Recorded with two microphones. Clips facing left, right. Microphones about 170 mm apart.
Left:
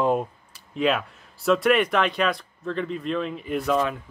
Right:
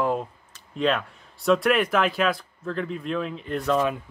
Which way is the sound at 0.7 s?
5° left (ahead or behind).